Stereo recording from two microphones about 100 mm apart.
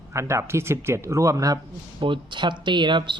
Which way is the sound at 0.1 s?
30° right (ahead or behind).